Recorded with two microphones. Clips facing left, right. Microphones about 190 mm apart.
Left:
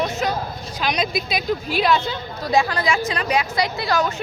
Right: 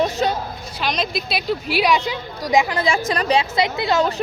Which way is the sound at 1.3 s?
10° right (ahead or behind).